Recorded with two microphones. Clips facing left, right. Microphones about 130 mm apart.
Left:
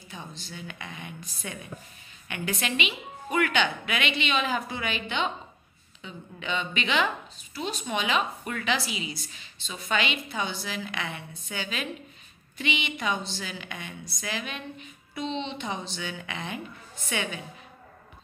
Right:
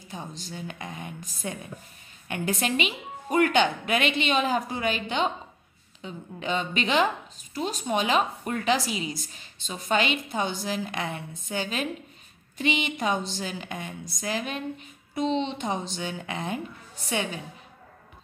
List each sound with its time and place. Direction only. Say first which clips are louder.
0.1 s a woman's voice: right 4 dB; 45° right (ahead or behind)